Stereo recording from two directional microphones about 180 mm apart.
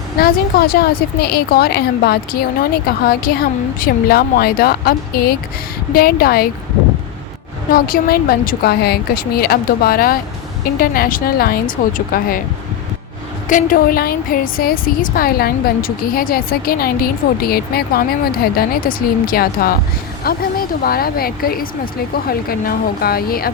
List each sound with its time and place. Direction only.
0.2 s a woman's voice: 55° left (ahead or behind)
7.7 s a woman's voice: 55° left (ahead or behind)
13.5 s a woman's voice: 45° left (ahead or behind)